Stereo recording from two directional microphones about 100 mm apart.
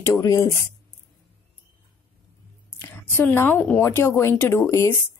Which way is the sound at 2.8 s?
20° left (ahead or behind).